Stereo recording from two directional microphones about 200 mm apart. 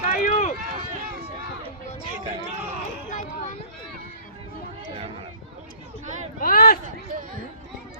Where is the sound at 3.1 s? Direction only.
40° left (ahead or behind).